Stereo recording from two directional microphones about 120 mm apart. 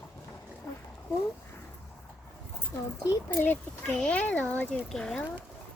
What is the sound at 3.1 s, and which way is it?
A child's voice, 20° left (ahead or behind).